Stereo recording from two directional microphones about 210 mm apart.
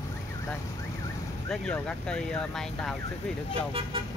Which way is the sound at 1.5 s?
5° left (ahead or behind).